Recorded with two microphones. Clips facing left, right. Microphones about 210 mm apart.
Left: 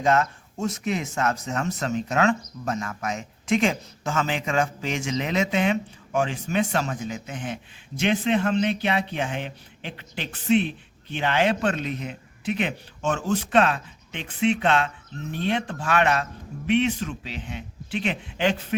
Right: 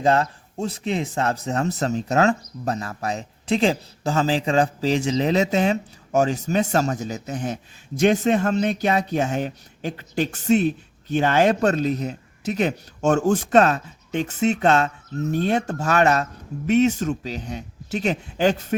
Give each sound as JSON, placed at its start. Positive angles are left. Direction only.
{"t": 0.0, "sound": "speech", "side_deg": -30}